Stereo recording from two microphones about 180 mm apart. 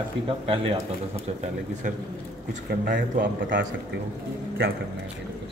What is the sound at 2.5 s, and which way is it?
Speech, 55° right (ahead or behind).